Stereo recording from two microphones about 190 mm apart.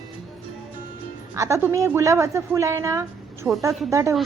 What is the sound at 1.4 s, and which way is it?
A woman's voice, 15° right (ahead or behind).